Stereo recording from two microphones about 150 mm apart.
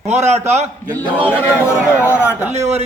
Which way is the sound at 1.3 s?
10° left (ahead or behind).